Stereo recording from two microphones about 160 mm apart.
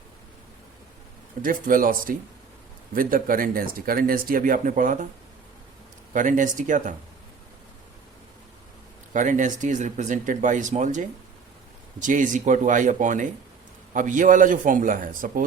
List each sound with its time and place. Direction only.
1.4 s speech: 60° right (ahead or behind)
6.1 s speech: 55° right (ahead or behind)
9.1 s speech: 50° right (ahead or behind)